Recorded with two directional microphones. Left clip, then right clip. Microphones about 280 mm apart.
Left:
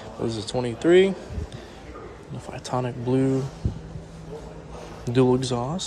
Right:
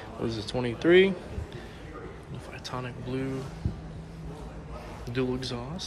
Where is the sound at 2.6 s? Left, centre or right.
Left.